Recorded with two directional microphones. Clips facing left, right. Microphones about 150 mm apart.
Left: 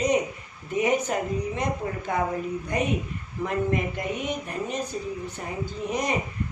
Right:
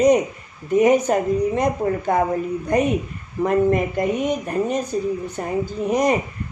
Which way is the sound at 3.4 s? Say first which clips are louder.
Right 8 dB; 50° right (ahead or behind).